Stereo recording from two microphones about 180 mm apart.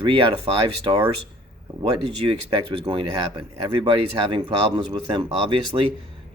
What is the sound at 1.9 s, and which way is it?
Speech, 30° right (ahead or behind).